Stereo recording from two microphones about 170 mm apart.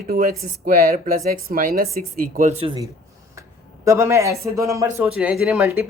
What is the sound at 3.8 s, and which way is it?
Speech, 15° right (ahead or behind).